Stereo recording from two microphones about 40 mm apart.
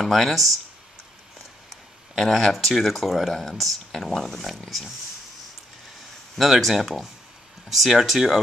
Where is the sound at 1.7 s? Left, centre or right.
Centre.